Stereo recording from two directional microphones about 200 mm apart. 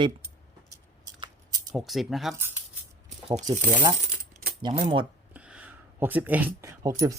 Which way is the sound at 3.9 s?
50° right (ahead or behind).